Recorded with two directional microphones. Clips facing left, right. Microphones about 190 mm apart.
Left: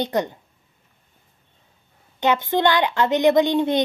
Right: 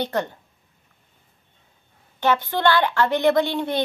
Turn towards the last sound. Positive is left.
turn(degrees=20)  # may be behind; listen again after turning